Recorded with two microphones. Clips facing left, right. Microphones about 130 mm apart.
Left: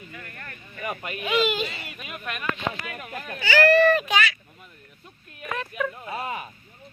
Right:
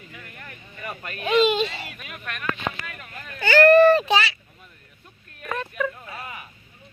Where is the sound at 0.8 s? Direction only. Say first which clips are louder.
Left 3 dB; 10° left (ahead or behind).